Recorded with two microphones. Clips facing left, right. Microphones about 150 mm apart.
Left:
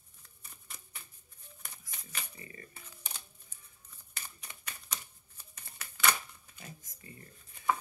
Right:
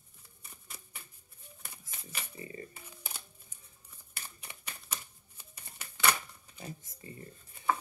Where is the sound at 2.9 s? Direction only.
10° right (ahead or behind).